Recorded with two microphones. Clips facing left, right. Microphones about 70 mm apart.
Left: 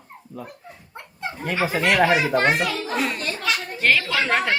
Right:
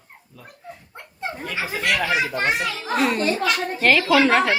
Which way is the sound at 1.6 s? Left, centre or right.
Left.